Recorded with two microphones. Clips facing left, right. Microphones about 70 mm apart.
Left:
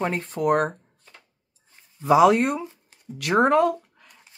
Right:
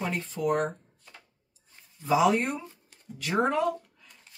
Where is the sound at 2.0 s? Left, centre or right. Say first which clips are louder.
Left 7 dB; left.